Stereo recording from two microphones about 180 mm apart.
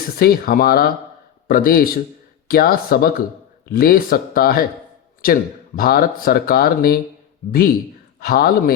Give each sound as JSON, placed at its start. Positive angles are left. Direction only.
{"t": 0.2, "sound": "speech", "side_deg": 55}